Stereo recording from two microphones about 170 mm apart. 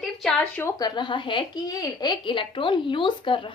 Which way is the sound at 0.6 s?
20° left (ahead or behind).